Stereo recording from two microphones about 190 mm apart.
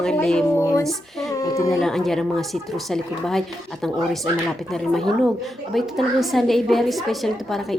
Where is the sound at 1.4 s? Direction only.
15° left (ahead or behind).